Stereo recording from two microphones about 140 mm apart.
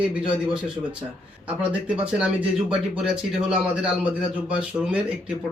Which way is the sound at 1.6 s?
10° right (ahead or behind).